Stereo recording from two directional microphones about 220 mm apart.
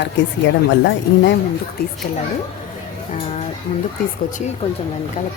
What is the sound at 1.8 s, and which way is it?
Speech, 45° left (ahead or behind).